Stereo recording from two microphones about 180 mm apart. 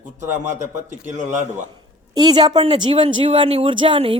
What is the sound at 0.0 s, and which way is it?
Speech, 45° right (ahead or behind).